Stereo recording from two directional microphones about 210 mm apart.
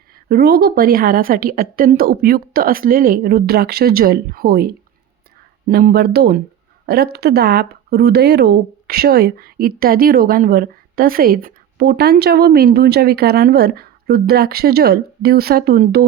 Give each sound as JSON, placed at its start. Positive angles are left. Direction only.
{"t": 0.1, "sound": "speech", "side_deg": -45}